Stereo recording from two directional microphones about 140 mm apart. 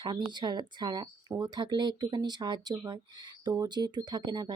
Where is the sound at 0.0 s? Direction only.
30° right (ahead or behind).